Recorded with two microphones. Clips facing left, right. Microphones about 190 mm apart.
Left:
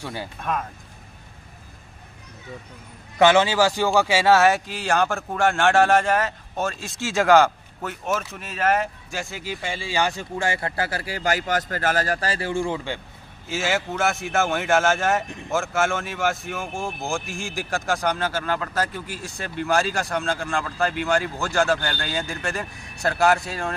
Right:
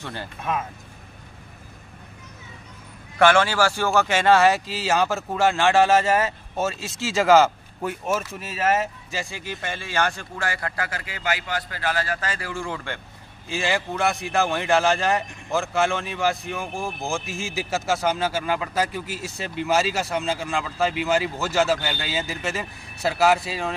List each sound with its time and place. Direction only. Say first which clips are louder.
0.0 s speech: left 2 dB; 10° left (ahead or behind)
0.4 s a man's voice: right 1 dB; 5° right (ahead or behind)
3.2 s a man's voice: left 1 dB; 20° left (ahead or behind); by 9.3 s 5° right (ahead or behind)
9.6 s speech: left 1 dB; 10° left (ahead or behind); by 12.7 s 25° left (ahead or behind)
12.7 s speech: left 3 dB; 15° left (ahead or behind)
13.6 s a man's voice: even; centre (ahead or behind)